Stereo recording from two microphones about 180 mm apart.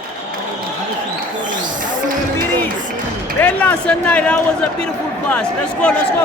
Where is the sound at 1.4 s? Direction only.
45° right (ahead or behind).